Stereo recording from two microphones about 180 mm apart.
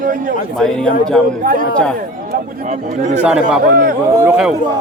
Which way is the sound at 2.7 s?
40° right (ahead or behind).